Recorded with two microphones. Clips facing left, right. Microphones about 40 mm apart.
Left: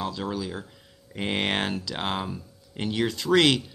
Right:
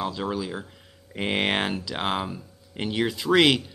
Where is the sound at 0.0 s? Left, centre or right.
Centre.